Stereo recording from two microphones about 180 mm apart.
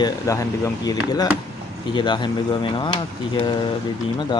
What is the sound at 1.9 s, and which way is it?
Speech, 25° left (ahead or behind).